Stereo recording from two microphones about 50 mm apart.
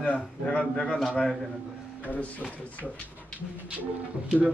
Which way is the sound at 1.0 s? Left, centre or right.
Centre.